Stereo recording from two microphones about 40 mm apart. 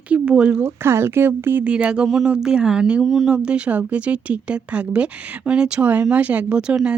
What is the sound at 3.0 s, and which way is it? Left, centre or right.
Speech, centre.